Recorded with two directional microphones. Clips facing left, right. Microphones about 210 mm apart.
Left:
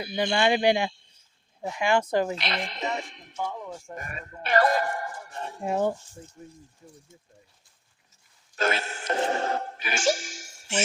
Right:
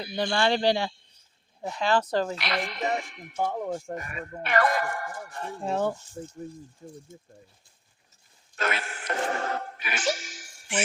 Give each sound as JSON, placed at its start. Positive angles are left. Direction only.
{"t": 0.3, "sound": "speech", "side_deg": 20}
{"t": 3.3, "sound": "speech", "side_deg": -55}
{"t": 4.4, "sound": "speech", "side_deg": 35}
{"t": 6.2, "sound": "speech", "side_deg": -40}
{"t": 8.5, "sound": "a sound", "side_deg": 30}